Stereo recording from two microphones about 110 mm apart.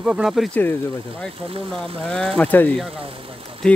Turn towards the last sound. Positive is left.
turn(degrees=10)  # may be behind; listen again after turning